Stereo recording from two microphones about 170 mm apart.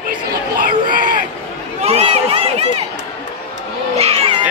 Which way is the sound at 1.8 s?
35° right (ahead or behind).